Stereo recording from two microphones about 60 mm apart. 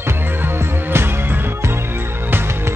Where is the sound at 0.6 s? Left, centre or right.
Right.